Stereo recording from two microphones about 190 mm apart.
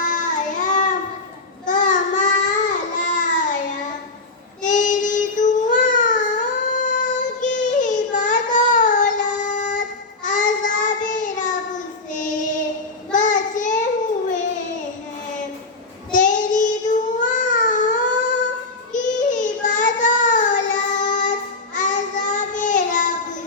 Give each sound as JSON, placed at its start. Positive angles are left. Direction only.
{"t": 0.0, "sound": "child singing", "side_deg": 40}
{"t": 1.6, "sound": "baby cry", "side_deg": 40}
{"t": 4.6, "sound": "child singing", "side_deg": 40}
{"t": 16.1, "sound": "child singing", "side_deg": 40}